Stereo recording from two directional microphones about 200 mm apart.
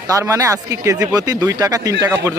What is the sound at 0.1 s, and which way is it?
A man's voice, 15° right (ahead or behind).